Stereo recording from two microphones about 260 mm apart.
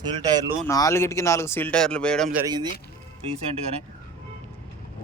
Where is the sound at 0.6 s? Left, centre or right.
Centre.